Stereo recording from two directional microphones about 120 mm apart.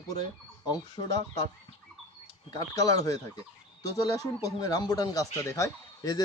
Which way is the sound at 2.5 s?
30° left (ahead or behind).